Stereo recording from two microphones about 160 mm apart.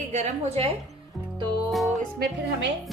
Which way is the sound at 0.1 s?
45° right (ahead or behind).